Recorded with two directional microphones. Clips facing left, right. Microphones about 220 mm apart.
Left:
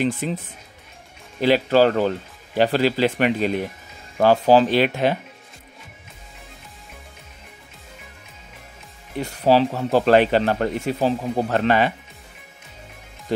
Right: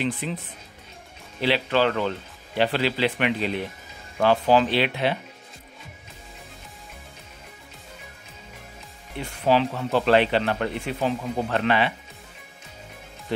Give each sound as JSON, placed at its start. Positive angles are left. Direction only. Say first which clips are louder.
{"t": 0.0, "sound": "speech", "louder": "left 5 dB", "side_deg": 45}
{"t": 1.4, "sound": "speech", "louder": "left 6 dB", "side_deg": 40}
{"t": 9.2, "sound": "speech", "louder": "left 4 dB", "side_deg": 35}